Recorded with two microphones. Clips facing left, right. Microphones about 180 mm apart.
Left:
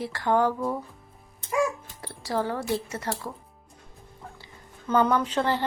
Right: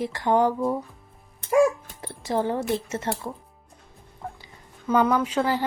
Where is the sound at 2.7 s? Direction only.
25° right (ahead or behind).